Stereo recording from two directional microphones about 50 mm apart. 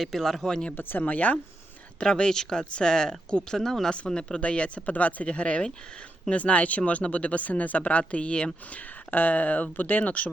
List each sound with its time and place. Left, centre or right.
0.0 s speech: centre
0.8 s speech: left
2.0 s speech: centre
3.9 s speech: centre
8.7 s speech: left